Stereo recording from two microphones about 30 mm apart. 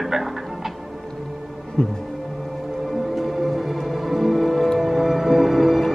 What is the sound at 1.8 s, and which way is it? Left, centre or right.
Music, left.